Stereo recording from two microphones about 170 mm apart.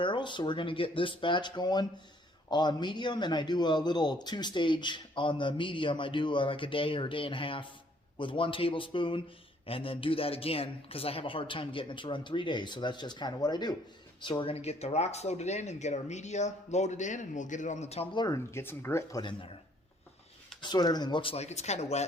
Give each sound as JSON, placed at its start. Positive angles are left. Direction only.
{"t": 0.0, "sound": "a man's voice", "side_deg": 30}
{"t": 18.1, "sound": "a man's voice", "side_deg": 25}
{"t": 18.5, "sound": "speech", "side_deg": 15}
{"t": 19.2, "sound": "a man's voice", "side_deg": 30}
{"t": 20.6, "sound": "speech", "side_deg": 25}